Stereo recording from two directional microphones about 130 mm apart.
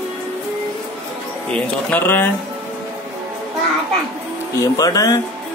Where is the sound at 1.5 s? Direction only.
10° left (ahead or behind).